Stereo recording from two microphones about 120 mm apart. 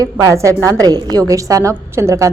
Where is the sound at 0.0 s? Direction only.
25° right (ahead or behind).